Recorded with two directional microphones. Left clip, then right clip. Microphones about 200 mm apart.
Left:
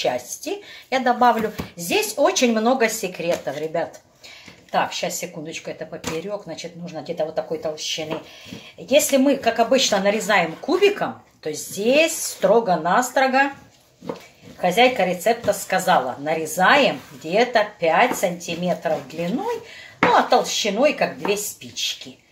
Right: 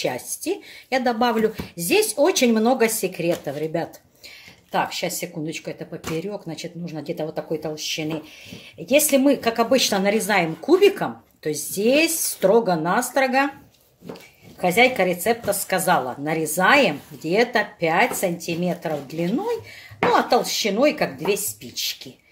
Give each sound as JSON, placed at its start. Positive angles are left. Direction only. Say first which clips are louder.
{"t": 0.0, "sound": "a woman's voice", "louder": "left 3 dB", "side_deg": -50}
{"t": 14.6, "sound": "a woman's voice", "louder": "left 1 dB", "side_deg": -50}
{"t": 20.1, "sound": "a woman's voice", "louder": "left 2 dB", "side_deg": -50}